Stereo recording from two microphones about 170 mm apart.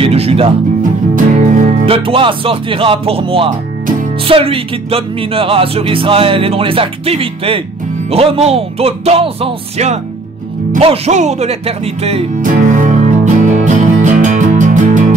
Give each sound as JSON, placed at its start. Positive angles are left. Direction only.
{"t": 0.0, "sound": "music", "side_deg": -35}
{"t": 1.1, "sound": "music", "side_deg": -50}
{"t": 1.9, "sound": "speech", "side_deg": -30}
{"t": 12.4, "sound": "music", "side_deg": -50}